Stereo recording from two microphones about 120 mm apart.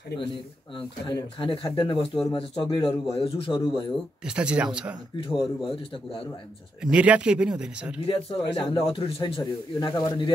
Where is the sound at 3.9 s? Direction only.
10° right (ahead or behind).